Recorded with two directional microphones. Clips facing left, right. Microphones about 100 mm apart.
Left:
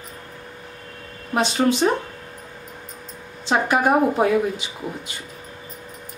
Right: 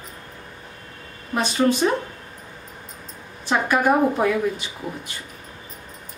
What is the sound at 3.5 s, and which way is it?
Speech, 35° left (ahead or behind).